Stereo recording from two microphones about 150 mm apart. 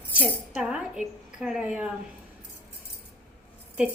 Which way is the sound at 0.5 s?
5° right (ahead or behind).